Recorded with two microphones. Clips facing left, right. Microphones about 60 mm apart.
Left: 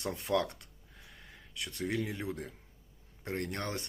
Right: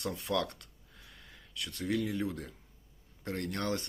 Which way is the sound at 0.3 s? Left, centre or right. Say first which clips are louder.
Left 3 dB; left.